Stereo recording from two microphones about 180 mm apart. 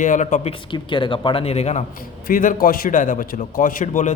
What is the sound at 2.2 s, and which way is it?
A man's voice, 50° left (ahead or behind).